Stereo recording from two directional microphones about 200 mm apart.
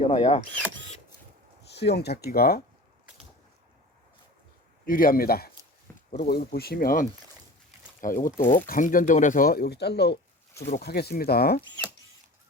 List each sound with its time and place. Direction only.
0.0 s speech: 30° left (ahead or behind)
1.7 s speech: 55° left (ahead or behind)
4.9 s speech: 45° left (ahead or behind)